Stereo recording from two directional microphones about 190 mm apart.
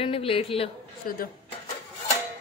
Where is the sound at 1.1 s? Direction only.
50° left (ahead or behind).